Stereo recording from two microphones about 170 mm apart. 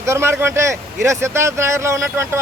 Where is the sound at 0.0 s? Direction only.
15° right (ahead or behind).